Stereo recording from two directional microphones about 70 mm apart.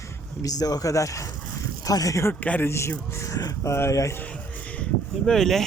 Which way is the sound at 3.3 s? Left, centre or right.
Left.